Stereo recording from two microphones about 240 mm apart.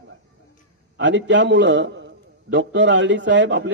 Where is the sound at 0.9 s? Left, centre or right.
Right.